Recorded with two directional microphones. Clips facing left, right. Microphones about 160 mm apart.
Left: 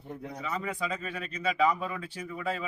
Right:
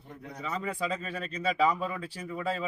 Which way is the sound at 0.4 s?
30° right (ahead or behind).